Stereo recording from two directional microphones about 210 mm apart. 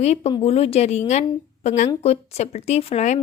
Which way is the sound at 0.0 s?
30° left (ahead or behind).